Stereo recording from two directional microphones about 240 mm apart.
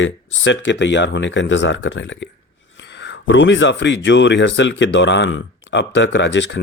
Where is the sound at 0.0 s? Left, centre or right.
Left.